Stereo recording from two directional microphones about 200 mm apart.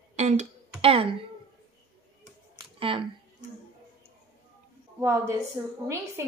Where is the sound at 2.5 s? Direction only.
25° right (ahead or behind).